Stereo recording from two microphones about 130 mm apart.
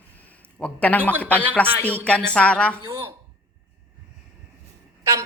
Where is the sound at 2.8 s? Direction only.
20° right (ahead or behind).